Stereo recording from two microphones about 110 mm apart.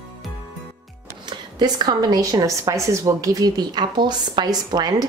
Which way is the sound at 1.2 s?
40° right (ahead or behind).